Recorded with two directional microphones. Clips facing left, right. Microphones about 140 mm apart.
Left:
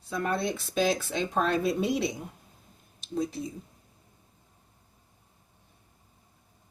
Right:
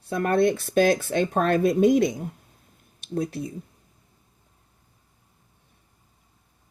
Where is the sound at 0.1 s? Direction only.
60° right (ahead or behind).